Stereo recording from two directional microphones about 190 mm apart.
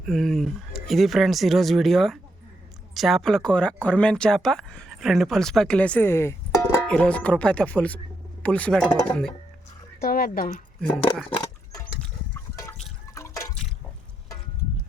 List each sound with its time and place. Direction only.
0.0 s speech: centre (ahead or behind)
10.0 s speech: 50° left (ahead or behind)
10.8 s speech: 5° left (ahead or behind)
13.1 s liquid: 15° left (ahead or behind)